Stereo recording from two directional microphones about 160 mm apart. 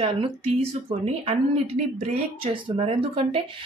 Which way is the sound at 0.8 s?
40° right (ahead or behind).